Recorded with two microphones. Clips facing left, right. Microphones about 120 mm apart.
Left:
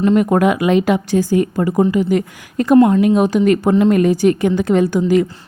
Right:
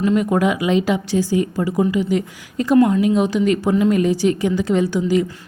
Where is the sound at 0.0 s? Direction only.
55° left (ahead or behind).